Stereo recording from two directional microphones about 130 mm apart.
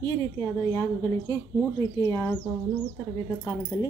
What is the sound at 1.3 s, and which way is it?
Speech, 25° left (ahead or behind).